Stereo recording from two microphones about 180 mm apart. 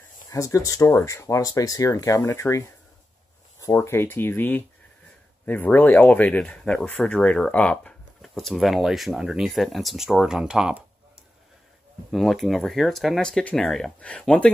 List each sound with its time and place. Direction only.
0.3 s speech: 20° left (ahead or behind)
3.6 s speech: 15° left (ahead or behind); by 10.8 s 5° right (ahead or behind)
12.1 s speech: centre (ahead or behind)